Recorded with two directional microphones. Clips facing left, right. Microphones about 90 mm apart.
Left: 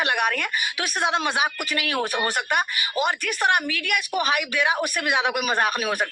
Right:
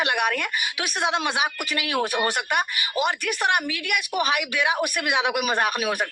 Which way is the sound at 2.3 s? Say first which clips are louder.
Even; 35° left (ahead or behind).